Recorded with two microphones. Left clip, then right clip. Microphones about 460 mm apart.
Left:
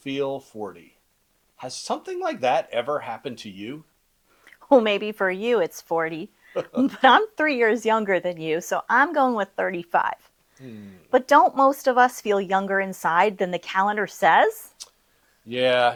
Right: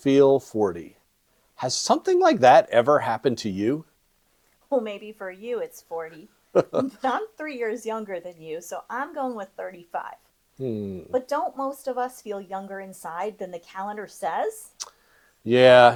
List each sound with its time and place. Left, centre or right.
0.0 s speech: right
4.7 s speech: left
6.5 s speech: right
6.9 s speech: left
14.8 s whispering: right
15.4 s speech: right